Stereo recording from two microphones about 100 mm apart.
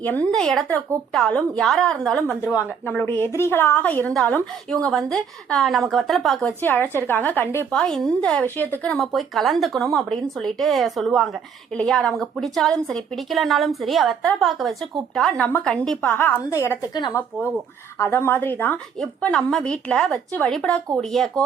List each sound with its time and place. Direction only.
0.3 s a woman's voice: 5° left (ahead or behind)
4.1 s a woman's voice: 5° left (ahead or behind)
6.4 s a woman's voice: 20° left (ahead or behind)
7.7 s a woman's voice: 5° left (ahead or behind)
8.4 s a woman's voice: 20° left (ahead or behind)
9.1 s a woman's voice: centre (ahead or behind); by 16.7 s 25° left (ahead or behind)
18.0 s a woman's voice: 25° left (ahead or behind)
18.9 s a woman's voice: 5° left (ahead or behind)